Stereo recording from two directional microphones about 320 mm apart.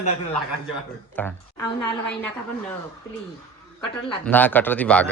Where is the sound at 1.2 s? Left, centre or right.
Centre.